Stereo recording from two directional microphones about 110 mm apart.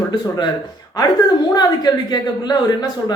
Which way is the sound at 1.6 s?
40° left (ahead or behind).